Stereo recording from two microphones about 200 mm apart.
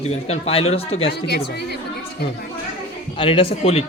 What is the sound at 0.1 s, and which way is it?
A man's voice, 30° left (ahead or behind).